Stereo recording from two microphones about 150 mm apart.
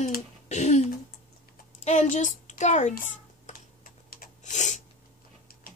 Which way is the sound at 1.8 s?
50° left (ahead or behind).